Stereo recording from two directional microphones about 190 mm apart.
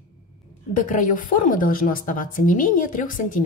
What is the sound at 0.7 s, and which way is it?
A woman's voice, 45° left (ahead or behind).